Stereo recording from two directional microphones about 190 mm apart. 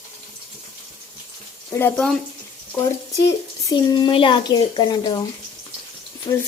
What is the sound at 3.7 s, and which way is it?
A woman's voice, 25° left (ahead or behind).